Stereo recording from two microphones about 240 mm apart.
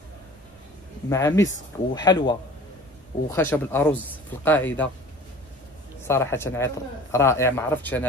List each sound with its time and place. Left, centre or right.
1.0 s a man's voice: centre
6.0 s a man's voice: centre